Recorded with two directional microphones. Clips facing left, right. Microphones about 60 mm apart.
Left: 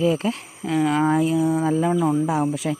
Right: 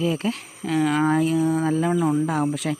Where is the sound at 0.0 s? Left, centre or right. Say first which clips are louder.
Left 3 dB; centre.